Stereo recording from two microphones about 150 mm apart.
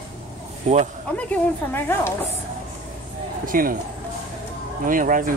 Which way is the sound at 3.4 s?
70° right (ahead or behind).